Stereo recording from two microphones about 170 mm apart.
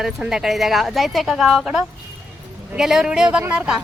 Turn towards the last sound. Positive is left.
turn(degrees=-5)  # may be behind; listen again after turning